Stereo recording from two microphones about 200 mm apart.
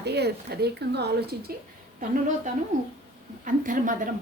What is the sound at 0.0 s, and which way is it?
Speech, 55° right (ahead or behind).